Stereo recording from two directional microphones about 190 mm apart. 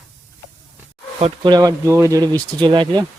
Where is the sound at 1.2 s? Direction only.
20° right (ahead or behind).